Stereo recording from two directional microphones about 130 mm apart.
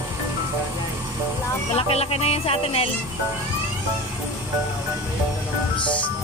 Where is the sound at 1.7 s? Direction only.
50° left (ahead or behind).